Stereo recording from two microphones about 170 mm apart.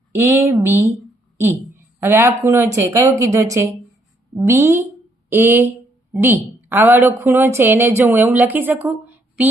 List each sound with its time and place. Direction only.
0.1 s a woman's voice: 15° right (ahead or behind)
2.0 s a woman's voice: 15° right (ahead or behind)